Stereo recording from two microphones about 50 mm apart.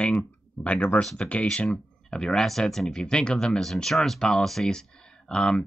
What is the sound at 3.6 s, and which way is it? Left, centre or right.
Speech, centre.